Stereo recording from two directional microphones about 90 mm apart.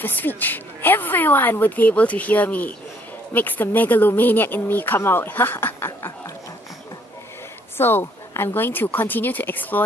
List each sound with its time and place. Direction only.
0.0 s speech: 20° left (ahead or behind)
7.7 s speech: 25° left (ahead or behind)